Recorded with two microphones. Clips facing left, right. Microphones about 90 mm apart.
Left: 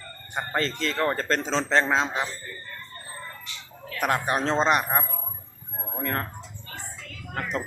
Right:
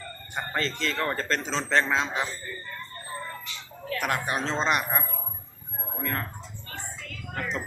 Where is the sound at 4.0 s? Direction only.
35° left (ahead or behind).